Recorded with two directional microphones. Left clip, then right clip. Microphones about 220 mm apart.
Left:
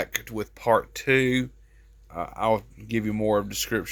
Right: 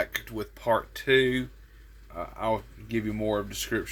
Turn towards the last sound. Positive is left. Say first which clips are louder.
# left 3 dB
turn(degrees=45)  # may be behind; listen again after turning